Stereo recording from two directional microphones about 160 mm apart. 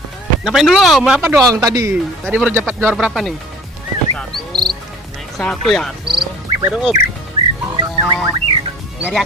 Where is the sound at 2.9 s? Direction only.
Centre (ahead or behind).